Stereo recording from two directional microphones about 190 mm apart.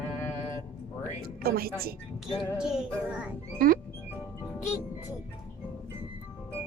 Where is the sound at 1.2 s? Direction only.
55° right (ahead or behind).